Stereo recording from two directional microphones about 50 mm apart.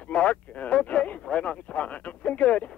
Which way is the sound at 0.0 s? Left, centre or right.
Left.